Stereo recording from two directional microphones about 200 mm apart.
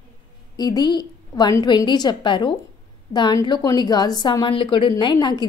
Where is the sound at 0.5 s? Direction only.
20° left (ahead or behind).